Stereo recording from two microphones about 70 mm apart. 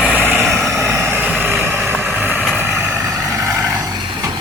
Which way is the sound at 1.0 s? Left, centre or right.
Right.